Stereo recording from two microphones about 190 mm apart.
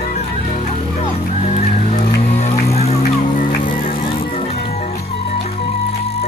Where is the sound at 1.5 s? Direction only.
45° left (ahead or behind).